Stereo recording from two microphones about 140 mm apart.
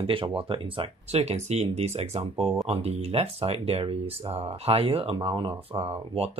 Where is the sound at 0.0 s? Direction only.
40° right (ahead or behind).